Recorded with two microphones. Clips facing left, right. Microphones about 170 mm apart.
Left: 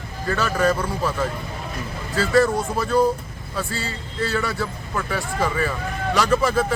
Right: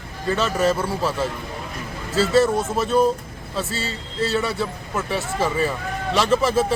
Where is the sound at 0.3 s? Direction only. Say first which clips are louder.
Right 1 dB; 20° right (ahead or behind).